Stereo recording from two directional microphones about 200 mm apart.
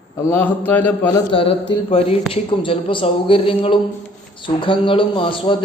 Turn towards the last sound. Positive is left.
turn(degrees=25)  # may be behind; listen again after turning